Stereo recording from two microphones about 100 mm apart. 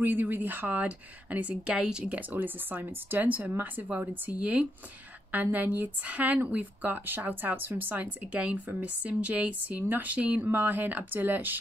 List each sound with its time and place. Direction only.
0.0 s speech: 20° right (ahead or behind)